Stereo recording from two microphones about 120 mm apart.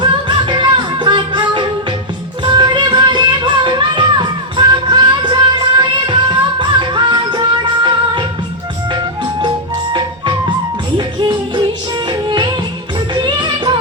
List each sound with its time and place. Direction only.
0.0 s music: 40° right (ahead or behind)
10.9 s music: 40° right (ahead or behind)